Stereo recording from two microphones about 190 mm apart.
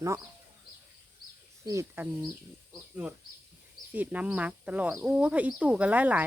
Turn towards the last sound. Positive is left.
turn(degrees=-10)  # may be behind; listen again after turning